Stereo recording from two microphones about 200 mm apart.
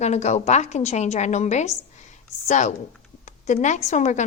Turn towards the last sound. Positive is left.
turn(degrees=35)  # may be behind; listen again after turning